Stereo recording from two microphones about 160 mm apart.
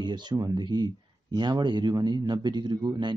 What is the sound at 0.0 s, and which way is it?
Speech, 30° right (ahead or behind).